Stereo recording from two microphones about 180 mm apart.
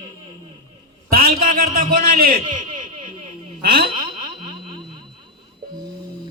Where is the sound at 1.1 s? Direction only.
55° right (ahead or behind).